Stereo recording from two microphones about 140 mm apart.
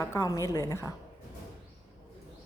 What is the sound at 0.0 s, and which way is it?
Speech, 20° left (ahead or behind).